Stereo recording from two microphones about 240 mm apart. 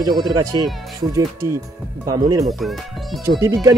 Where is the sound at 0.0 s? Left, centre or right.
Centre.